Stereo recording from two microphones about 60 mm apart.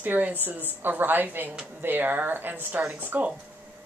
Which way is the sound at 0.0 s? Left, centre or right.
Right.